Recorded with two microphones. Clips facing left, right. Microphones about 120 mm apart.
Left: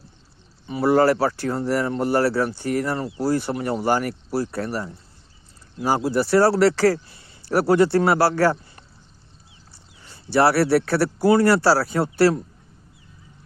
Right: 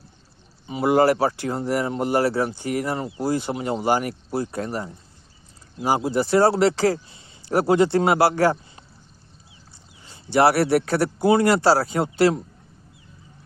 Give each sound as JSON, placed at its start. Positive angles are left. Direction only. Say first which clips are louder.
{"t": 0.7, "sound": "speech", "louder": "left 1 dB", "side_deg": -20}